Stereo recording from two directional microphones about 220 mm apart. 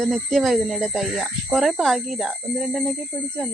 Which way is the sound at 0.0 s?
Centre (ahead or behind).